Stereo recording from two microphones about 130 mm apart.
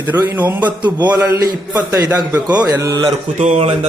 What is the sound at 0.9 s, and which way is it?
A man's voice, 30° right (ahead or behind).